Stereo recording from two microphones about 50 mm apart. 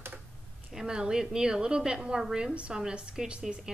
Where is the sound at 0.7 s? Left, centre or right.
Centre.